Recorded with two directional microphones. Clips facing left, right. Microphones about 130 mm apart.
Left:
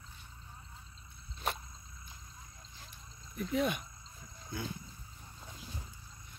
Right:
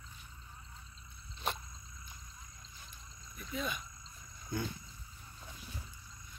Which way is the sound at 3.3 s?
70° left (ahead or behind).